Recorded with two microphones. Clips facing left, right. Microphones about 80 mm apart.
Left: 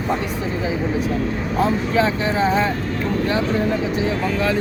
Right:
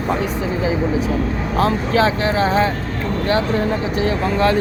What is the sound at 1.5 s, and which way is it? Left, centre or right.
Speech, right.